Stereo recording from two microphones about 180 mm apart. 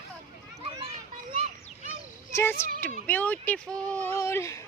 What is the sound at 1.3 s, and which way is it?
Children playing, 35° right (ahead or behind).